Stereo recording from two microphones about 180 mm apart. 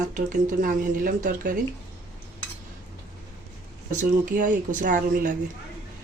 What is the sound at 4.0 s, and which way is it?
Speech, 45° right (ahead or behind).